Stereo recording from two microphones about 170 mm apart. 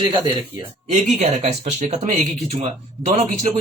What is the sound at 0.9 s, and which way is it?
Speech, 40° right (ahead or behind).